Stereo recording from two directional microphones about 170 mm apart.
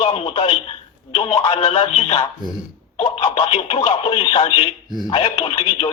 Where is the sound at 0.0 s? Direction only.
35° left (ahead or behind).